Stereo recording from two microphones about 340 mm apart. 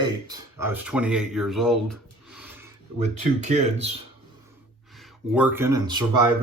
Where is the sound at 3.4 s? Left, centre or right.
Centre.